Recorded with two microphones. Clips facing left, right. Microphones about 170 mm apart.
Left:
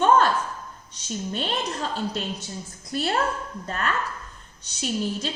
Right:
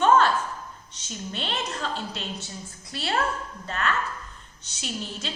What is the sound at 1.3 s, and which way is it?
Speech, 45° left (ahead or behind).